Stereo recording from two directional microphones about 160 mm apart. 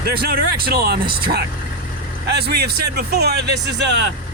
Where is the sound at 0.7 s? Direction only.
75° right (ahead or behind).